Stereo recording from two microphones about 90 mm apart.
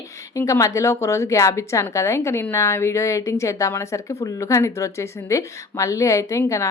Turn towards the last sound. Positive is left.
turn(degrees=35)  # may be behind; listen again after turning